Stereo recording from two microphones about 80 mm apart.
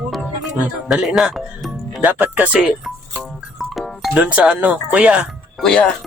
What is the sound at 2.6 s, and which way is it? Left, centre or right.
Music, centre.